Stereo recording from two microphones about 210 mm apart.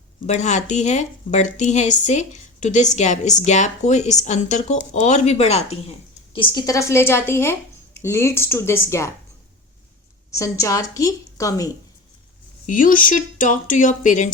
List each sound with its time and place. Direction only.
0.3 s a woman's voice: 35° left (ahead or behind); by 9.0 s 10° left (ahead or behind)
10.3 s a woman's voice: 15° left (ahead or behind)
12.6 s a woman's voice: 40° left (ahead or behind)